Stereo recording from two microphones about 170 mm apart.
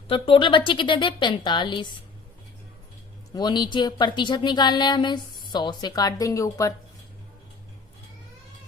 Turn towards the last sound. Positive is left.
turn(degrees=20)  # may be behind; listen again after turning